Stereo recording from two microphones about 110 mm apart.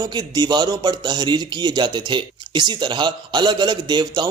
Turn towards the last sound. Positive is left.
turn(degrees=-40)  # may be behind; listen again after turning